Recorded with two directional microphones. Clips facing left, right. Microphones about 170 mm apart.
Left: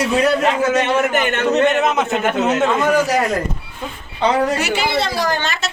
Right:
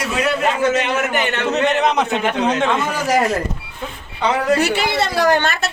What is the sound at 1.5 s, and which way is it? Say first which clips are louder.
A man's voice: even; centre (ahead or behind).